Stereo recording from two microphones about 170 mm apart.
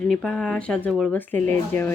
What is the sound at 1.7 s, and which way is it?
Speech, 45° right (ahead or behind).